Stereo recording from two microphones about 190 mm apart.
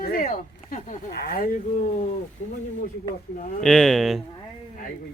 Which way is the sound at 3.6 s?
5° left (ahead or behind).